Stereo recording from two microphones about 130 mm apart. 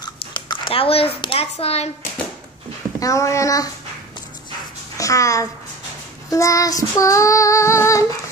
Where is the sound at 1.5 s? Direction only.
55° left (ahead or behind).